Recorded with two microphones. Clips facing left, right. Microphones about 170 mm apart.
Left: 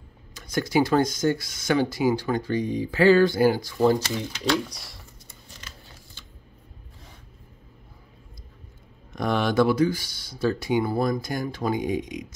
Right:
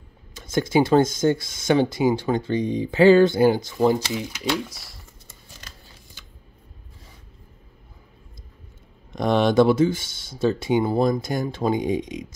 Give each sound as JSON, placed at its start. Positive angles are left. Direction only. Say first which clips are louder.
{"t": 0.3, "sound": "speech", "louder": "right 3 dB", "side_deg": -20}
{"t": 4.4, "sound": "speech", "louder": "left 4 dB", "side_deg": -5}
{"t": 9.1, "sound": "speech", "louder": "right 5 dB", "side_deg": -20}